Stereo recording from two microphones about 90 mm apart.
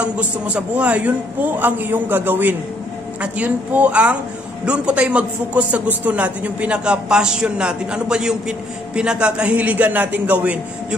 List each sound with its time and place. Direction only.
0.0 s a man's voice: 15° right (ahead or behind)